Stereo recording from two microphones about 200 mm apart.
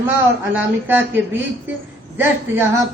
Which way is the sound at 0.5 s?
10° right (ahead or behind).